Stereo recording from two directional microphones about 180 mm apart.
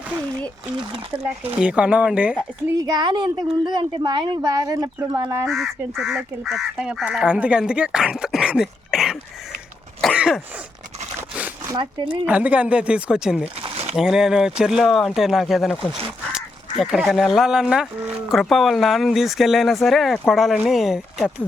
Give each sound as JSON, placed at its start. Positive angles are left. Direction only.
{"t": 1.5, "sound": "speech", "side_deg": -5}
{"t": 2.7, "sound": "speech", "side_deg": -20}
{"t": 5.5, "sound": "speech", "side_deg": 0}
{"t": 10.2, "sound": "throat clearing", "side_deg": -5}
{"t": 11.2, "sound": "a sound", "side_deg": -10}
{"t": 12.0, "sound": "speech", "side_deg": -5}
{"t": 13.6, "sound": "a sound", "side_deg": -35}
{"t": 13.9, "sound": "speech", "side_deg": -5}